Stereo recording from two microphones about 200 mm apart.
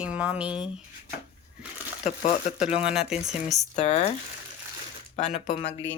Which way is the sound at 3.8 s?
35° left (ahead or behind).